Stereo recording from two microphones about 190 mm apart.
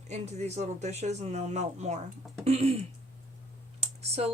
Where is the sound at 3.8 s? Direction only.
30° right (ahead or behind).